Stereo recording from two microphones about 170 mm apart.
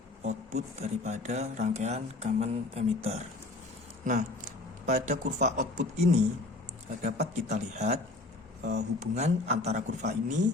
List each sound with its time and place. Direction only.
0.2 s speech: 40° right (ahead or behind)
9.1 s speech: 40° right (ahead or behind)